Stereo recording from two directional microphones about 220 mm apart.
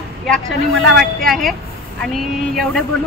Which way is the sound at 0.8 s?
Centre (ahead or behind).